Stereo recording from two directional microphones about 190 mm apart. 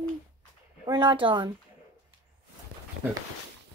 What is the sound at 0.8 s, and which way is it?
Speech, 25° right (ahead or behind).